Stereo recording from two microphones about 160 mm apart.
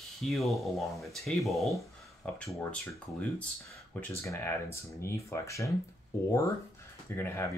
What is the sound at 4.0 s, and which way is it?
Speech, 15° left (ahead or behind).